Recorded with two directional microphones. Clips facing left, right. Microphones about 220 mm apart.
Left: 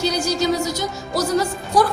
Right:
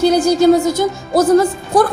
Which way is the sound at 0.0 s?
50° right (ahead or behind).